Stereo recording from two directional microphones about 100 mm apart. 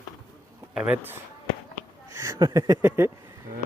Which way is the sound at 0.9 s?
20° right (ahead or behind).